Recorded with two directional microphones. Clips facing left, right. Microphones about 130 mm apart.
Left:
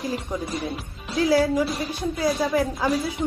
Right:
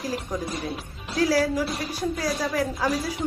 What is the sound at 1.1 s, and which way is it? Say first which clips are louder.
Speech: left 2 dB; 25° left (ahead or behind).